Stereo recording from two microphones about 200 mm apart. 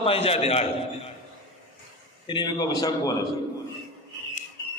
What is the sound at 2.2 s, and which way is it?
Speech, 20° left (ahead or behind).